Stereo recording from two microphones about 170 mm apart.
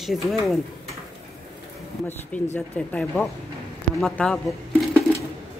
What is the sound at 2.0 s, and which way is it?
Speech, 10° left (ahead or behind).